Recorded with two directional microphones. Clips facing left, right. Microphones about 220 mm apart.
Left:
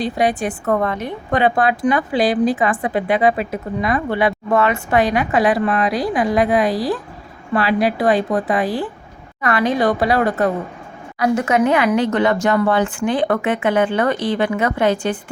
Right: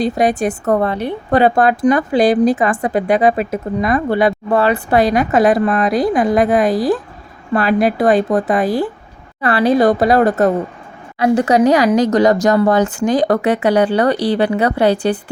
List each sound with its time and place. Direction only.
0.0 s a woman's voice: 45° right (ahead or behind)